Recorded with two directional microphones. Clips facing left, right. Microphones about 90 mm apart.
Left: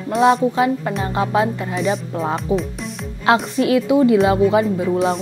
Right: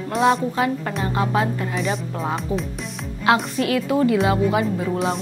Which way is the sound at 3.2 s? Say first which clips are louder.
Left 3 dB; 30° left (ahead or behind).